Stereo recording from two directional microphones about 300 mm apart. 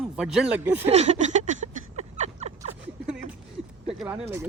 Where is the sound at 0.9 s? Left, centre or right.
Right.